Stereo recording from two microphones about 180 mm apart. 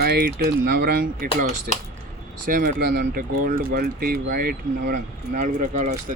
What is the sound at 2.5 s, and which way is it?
Speech, 50° right (ahead or behind).